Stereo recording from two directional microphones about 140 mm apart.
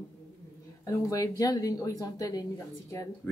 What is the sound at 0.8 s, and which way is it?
Speech, 20° left (ahead or behind).